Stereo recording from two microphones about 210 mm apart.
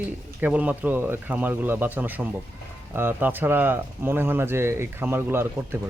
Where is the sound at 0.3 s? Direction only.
10° right (ahead or behind).